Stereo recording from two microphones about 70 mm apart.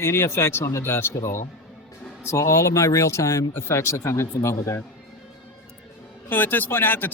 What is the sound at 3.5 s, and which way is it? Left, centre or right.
Speech, left.